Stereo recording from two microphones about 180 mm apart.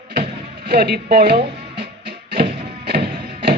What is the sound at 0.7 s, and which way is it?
Music, 60° right (ahead or behind).